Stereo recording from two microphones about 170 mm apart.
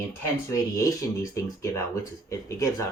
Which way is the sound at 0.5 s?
20° left (ahead or behind).